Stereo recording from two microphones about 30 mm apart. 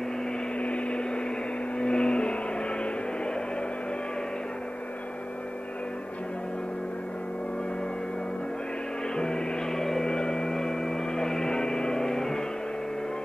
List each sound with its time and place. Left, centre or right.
0.6 s microwave oven: left
1.8 s vehicle: left
9.1 s music: left
10.0 s a sound: left